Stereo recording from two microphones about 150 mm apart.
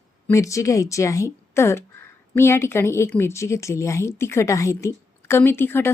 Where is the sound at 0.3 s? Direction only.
20° left (ahead or behind).